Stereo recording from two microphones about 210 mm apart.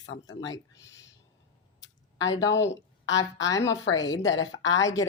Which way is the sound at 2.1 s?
65° left (ahead or behind).